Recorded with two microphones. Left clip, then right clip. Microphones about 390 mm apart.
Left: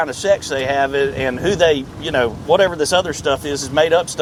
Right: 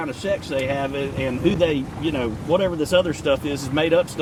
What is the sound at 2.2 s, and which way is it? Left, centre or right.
Speech, left.